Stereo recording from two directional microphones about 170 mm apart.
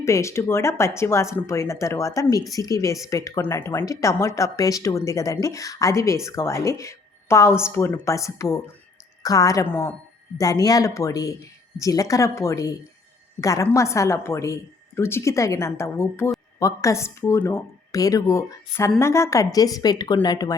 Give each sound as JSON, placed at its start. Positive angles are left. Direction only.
{"t": 0.0, "sound": "a woman's voice", "side_deg": 15}